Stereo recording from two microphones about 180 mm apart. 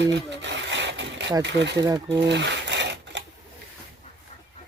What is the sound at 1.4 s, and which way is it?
Speech, 75° right (ahead or behind).